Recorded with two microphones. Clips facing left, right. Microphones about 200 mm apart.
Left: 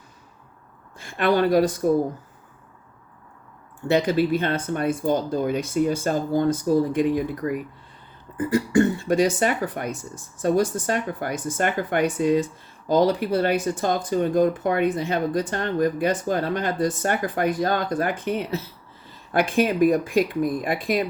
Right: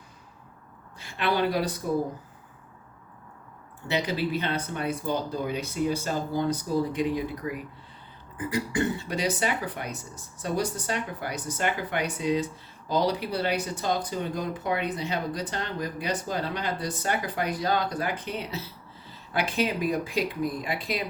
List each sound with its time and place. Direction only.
0.9 s speech: 50° left (ahead or behind)
3.8 s speech: 50° left (ahead or behind)